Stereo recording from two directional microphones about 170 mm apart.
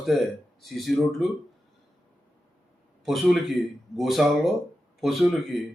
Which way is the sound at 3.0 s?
Centre (ahead or behind).